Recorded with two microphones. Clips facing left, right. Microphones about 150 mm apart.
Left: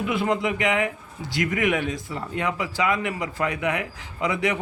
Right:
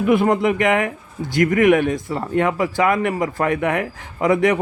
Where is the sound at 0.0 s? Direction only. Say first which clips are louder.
Right 8 dB; 50° right (ahead or behind).